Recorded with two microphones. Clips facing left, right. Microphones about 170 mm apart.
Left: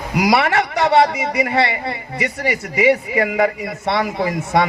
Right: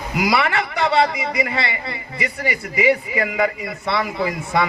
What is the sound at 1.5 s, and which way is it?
Speech, 60° left (ahead or behind).